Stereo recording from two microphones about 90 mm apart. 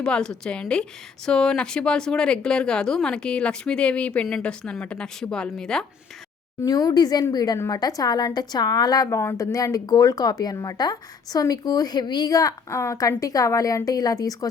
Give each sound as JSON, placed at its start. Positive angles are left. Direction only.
{"t": 0.0, "sound": "a woman's voice", "side_deg": 10}
{"t": 6.6, "sound": "a woman's voice", "side_deg": 40}